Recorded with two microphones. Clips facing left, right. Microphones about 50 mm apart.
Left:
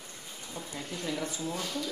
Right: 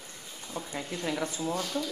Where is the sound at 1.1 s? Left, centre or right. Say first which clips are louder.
Right 3 dB; right.